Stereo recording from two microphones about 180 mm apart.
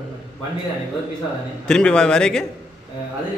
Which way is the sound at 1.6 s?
5° left (ahead or behind).